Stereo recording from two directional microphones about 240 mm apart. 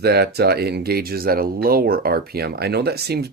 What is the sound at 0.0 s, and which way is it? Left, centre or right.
Speech, right.